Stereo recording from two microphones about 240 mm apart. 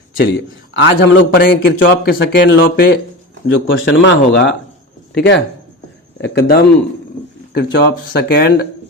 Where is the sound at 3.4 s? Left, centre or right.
Left.